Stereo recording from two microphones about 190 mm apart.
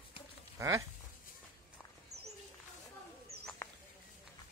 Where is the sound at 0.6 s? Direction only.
15° right (ahead or behind).